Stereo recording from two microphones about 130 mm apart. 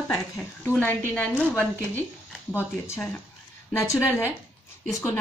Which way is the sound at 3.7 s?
20° left (ahead or behind).